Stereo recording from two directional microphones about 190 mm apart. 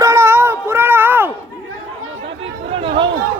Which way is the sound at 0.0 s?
15° right (ahead or behind).